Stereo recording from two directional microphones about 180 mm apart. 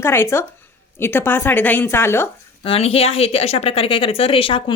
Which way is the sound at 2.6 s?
30° left (ahead or behind).